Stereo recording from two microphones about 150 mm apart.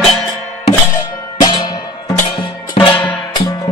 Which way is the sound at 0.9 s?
25° left (ahead or behind).